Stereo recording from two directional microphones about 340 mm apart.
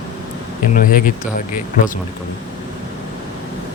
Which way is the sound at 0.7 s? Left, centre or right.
Left.